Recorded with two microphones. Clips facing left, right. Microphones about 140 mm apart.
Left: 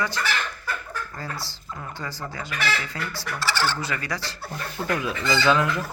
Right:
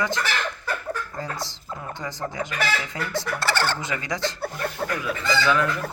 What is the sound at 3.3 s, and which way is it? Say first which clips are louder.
Speech: even; 55° right (ahead or behind).